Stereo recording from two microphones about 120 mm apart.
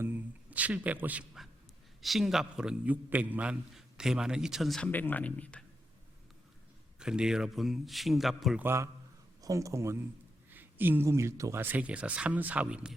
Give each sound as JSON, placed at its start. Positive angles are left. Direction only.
{"t": 0.0, "sound": "a sound", "side_deg": -15}
{"t": 2.0, "sound": "a man's voice", "side_deg": 0}
{"t": 4.9, "sound": "speech", "side_deg": 15}
{"t": 7.0, "sound": "a man's voice", "side_deg": -5}
{"t": 8.5, "sound": "speech", "side_deg": -20}
{"t": 11.6, "sound": "speech", "side_deg": -10}